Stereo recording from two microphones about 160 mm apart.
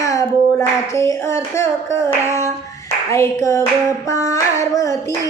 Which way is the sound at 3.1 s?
20° left (ahead or behind).